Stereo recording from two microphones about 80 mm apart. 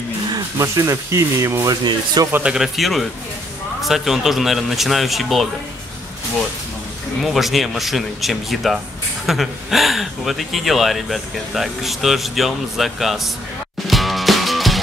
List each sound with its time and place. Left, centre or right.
0.6 s speech: right
2.4 s speech: centre
7.2 s speech: centre
13.8 s music: centre